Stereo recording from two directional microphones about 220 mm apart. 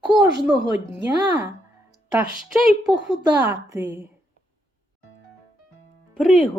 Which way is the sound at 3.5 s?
15° right (ahead or behind).